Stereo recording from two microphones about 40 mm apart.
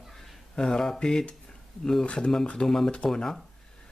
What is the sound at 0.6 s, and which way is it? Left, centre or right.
Speech, centre.